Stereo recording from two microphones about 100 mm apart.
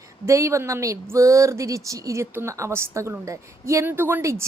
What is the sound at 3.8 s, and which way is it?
Speech, 20° right (ahead or behind).